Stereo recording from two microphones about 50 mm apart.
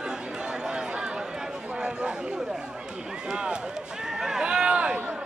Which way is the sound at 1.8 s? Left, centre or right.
Right.